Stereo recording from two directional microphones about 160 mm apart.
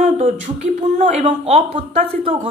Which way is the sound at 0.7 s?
40° right (ahead or behind).